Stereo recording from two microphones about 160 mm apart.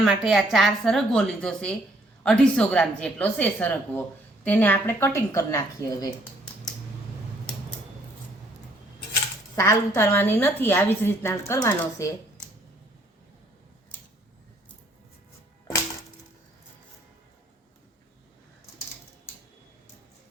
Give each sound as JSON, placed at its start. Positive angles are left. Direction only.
{"t": 0.0, "sound": "a woman's voice", "side_deg": -5}
{"t": 9.6, "sound": "a woman's voice", "side_deg": 20}